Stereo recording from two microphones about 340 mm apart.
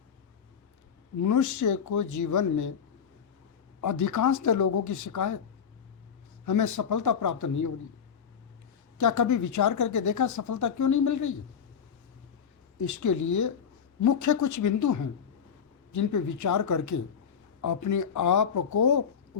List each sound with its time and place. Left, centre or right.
1.2 s speech: left
3.8 s speech: left
6.4 s speech: left
9.0 s speech: left
12.7 s speech: left